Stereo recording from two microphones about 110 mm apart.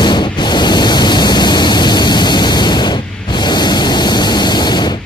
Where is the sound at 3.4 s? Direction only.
40° left (ahead or behind).